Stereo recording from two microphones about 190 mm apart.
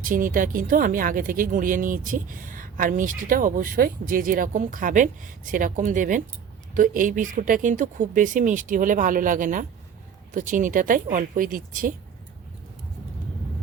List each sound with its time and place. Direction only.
0.0 s speech: 45° right (ahead or behind)